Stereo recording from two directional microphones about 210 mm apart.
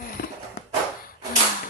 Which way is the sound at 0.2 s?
45° left (ahead or behind).